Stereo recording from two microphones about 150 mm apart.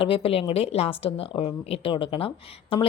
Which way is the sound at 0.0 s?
40° left (ahead or behind).